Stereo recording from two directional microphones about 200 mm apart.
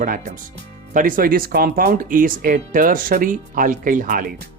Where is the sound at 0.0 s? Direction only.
40° right (ahead or behind).